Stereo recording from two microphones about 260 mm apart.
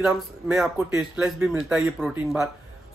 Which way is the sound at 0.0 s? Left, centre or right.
Centre.